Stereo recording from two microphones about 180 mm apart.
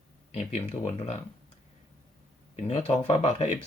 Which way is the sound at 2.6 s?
35° left (ahead or behind).